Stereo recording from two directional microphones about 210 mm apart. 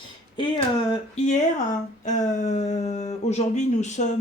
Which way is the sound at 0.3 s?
25° left (ahead or behind).